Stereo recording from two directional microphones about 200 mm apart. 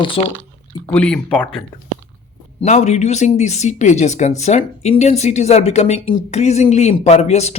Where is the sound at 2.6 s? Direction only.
35° left (ahead or behind).